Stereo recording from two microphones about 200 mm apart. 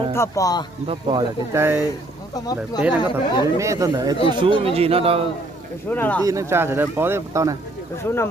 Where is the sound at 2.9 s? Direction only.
20° left (ahead or behind).